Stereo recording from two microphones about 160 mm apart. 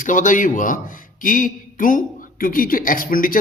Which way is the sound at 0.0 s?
55° left (ahead or behind).